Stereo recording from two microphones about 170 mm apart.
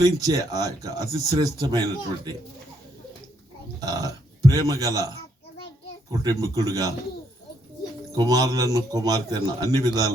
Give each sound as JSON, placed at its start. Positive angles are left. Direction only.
{"t": 0.0, "sound": "speech", "side_deg": -20}
{"t": 3.8, "sound": "speech", "side_deg": -20}
{"t": 6.1, "sound": "speech", "side_deg": -20}
{"t": 8.1, "sound": "speech", "side_deg": -20}